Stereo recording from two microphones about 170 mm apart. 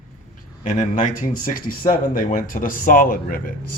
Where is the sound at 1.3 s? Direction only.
55° left (ahead or behind).